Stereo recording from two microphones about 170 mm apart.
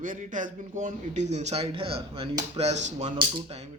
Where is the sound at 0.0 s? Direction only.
50° right (ahead or behind).